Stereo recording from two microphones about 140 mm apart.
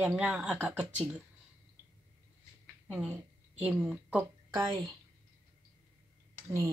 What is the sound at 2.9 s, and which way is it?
A woman's voice, 10° right (ahead or behind).